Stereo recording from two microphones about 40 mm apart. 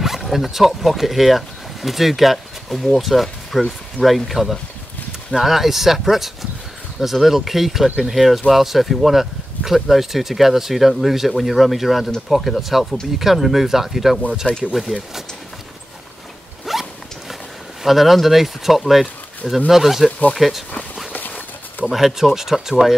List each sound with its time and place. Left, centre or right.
0.2 s speech: centre
16.7 s zipper: centre
17.8 s speech: centre
20.1 s speech: left
20.3 s speech: centre
21.8 s speech: centre